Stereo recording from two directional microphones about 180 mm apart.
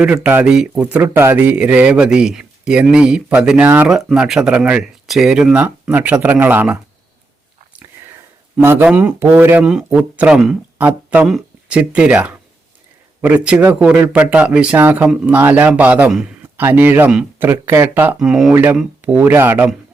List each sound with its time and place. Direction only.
0.0 s speech: 5° right (ahead or behind)
7.8 s whispering: 10° right (ahead or behind)
8.6 s speech: 10° right (ahead or behind)